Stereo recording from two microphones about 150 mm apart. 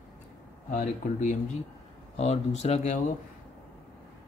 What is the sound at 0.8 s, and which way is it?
Speech, 55° left (ahead or behind).